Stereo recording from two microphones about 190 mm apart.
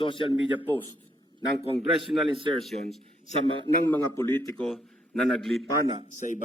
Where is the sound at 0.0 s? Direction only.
25° left (ahead or behind).